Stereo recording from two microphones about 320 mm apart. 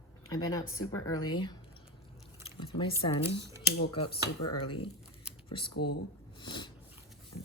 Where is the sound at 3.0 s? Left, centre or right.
Centre.